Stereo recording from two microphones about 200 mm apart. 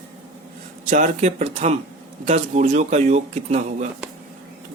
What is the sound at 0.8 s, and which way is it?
Speech, 40° right (ahead or behind).